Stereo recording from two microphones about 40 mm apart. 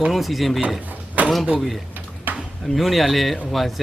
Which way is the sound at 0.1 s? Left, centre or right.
Centre.